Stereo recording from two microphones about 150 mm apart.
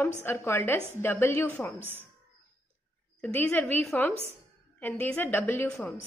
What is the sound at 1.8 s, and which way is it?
Speech, 15° right (ahead or behind).